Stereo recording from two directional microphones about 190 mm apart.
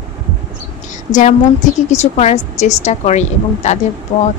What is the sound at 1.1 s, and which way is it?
A woman's voice, 40° left (ahead or behind).